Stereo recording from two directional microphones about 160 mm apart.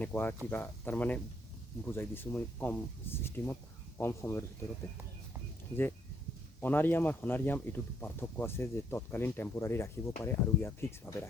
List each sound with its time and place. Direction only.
0.0 s speech: 10° left (ahead or behind)
6.6 s speech: 10° left (ahead or behind)